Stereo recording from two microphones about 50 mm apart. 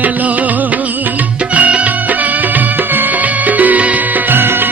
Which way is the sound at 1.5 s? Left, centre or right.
Right.